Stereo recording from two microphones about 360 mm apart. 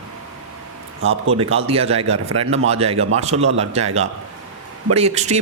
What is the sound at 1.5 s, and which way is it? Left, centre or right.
Speech, centre.